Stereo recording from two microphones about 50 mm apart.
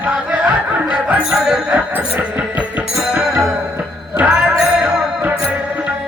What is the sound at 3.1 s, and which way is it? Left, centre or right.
Music, centre.